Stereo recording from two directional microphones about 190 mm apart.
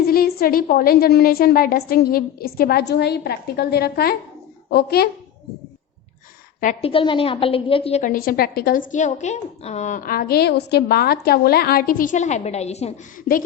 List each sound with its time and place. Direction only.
0.1 s a woman's voice: 50° left (ahead or behind)
6.6 s a woman's voice: 40° left (ahead or behind)
6.9 s a woman's voice: 25° left (ahead or behind)